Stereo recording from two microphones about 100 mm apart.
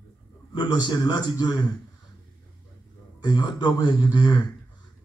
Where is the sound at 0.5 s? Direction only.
50° left (ahead or behind).